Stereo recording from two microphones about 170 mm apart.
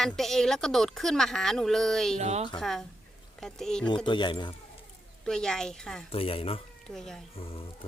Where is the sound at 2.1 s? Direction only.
40° right (ahead or behind).